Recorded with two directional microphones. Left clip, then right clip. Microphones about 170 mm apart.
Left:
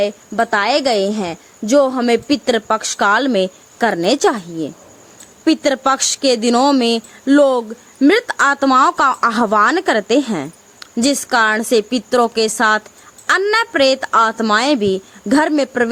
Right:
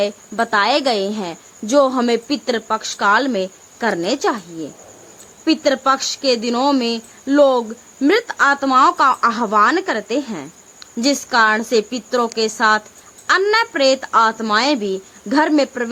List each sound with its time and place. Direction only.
0.0 s a woman's voice: 30° left (ahead or behind)